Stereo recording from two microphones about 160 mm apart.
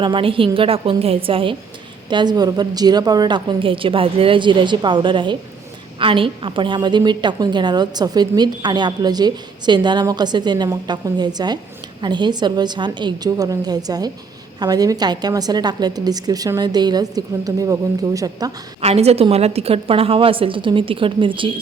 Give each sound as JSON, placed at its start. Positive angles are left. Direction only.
{"t": 0.0, "sound": "a woman's voice", "side_deg": -30}
{"t": 18.8, "sound": "a woman's voice", "side_deg": -40}